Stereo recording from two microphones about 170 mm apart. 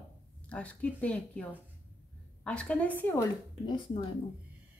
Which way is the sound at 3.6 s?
30° left (ahead or behind).